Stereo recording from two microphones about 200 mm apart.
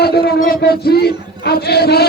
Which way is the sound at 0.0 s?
50° left (ahead or behind).